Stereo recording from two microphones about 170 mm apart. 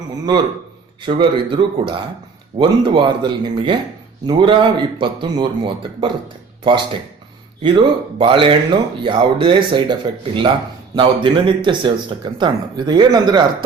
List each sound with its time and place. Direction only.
1.0 s speech: 30° right (ahead or behind)